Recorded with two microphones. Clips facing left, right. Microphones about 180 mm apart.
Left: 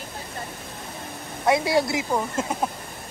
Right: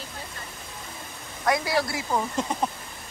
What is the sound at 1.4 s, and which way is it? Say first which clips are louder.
Speech: left 4 dB; 25° left (ahead or behind).